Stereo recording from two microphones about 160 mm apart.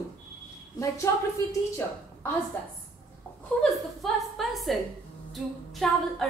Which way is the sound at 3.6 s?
Centre (ahead or behind).